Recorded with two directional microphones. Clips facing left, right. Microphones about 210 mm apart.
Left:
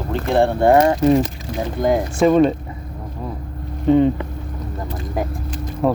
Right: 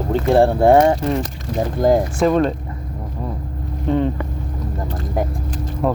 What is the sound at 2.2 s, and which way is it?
Speech, centre (ahead or behind).